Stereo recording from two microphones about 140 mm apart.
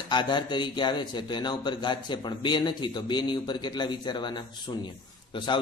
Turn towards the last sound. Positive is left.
turn(degrees=35)  # may be behind; listen again after turning